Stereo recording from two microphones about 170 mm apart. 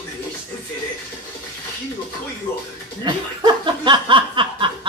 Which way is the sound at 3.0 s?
25° right (ahead or behind).